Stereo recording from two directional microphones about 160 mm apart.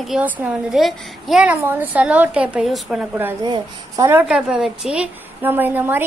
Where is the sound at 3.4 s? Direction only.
30° right (ahead or behind).